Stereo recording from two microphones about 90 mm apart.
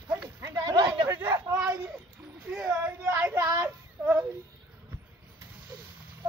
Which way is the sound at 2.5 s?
10° right (ahead or behind).